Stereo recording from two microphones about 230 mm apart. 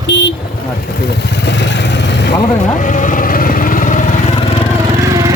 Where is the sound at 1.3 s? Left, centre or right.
Left.